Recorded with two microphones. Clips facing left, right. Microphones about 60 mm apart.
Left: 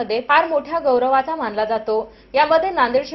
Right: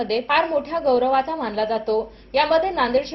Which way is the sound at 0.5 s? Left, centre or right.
Left.